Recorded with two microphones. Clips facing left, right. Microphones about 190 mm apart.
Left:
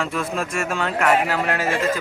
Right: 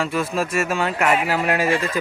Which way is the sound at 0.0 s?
5° right (ahead or behind).